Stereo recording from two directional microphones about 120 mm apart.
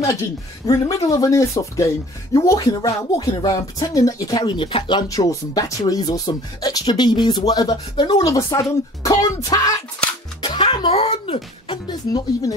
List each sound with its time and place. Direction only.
0.7 s speech: 30° left (ahead or behind)
5.0 s speech: 30° left (ahead or behind)
10.4 s speech: 45° left (ahead or behind); by 11.4 s 60° left (ahead or behind)
11.7 s speech: 35° left (ahead or behind)